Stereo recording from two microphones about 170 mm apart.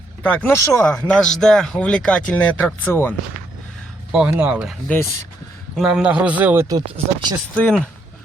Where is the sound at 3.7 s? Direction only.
5° right (ahead or behind).